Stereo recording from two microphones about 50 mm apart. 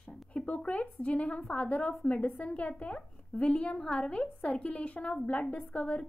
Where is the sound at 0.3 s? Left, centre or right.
Left.